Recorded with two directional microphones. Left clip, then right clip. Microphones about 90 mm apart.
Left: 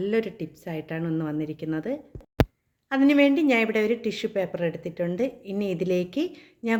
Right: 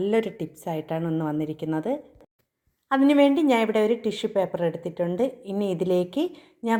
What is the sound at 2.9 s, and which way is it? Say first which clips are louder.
A woman's voice: right 1 dB; 20° right (ahead or behind).